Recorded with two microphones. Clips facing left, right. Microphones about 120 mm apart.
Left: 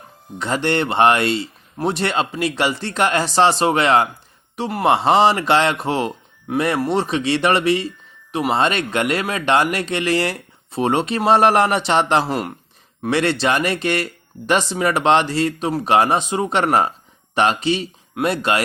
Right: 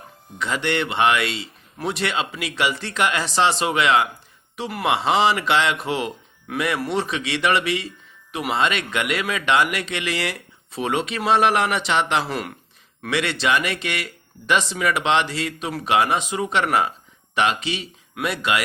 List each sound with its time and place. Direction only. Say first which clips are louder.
0.3 s speech: left 4 dB; 40° left (ahead or behind)